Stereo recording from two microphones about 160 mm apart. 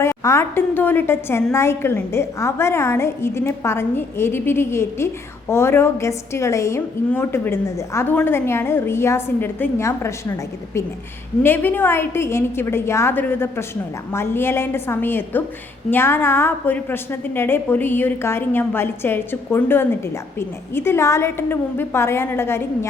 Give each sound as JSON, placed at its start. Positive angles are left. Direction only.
{"t": 0.0, "sound": "a woman's voice", "side_deg": 20}
{"t": 11.4, "sound": "a woman's voice", "side_deg": 10}